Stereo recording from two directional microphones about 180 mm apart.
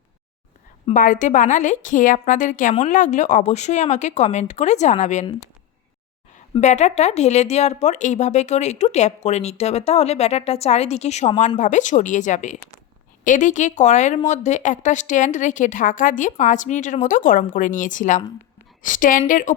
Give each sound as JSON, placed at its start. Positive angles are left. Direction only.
{"t": 0.9, "sound": "a woman's voice", "side_deg": 45}
{"t": 6.5, "sound": "a woman's voice", "side_deg": 40}